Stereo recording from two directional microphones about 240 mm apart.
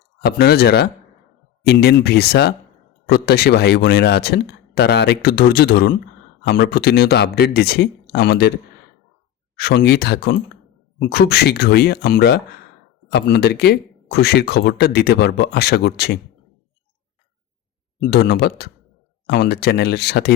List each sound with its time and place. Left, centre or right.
0.3 s speech: left
9.6 s speech: left
18.1 s speech: left